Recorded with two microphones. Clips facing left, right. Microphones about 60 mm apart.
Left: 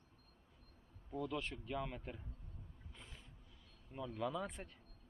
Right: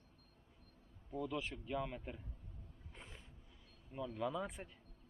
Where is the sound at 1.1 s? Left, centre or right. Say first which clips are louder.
Even; centre.